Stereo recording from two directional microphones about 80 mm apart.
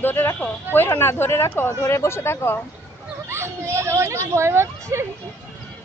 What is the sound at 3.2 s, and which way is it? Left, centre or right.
Speech, right.